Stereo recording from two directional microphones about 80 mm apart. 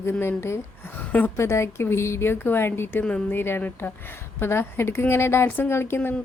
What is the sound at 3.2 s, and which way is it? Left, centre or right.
A woman's voice, left.